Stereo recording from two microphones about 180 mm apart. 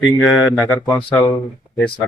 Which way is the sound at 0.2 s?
5° left (ahead or behind).